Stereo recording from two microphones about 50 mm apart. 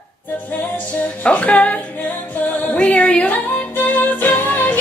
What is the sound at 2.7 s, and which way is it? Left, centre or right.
Music, left.